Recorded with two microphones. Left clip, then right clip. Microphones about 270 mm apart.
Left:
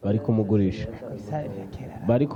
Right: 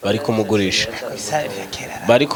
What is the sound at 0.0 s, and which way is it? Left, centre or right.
Speech, centre.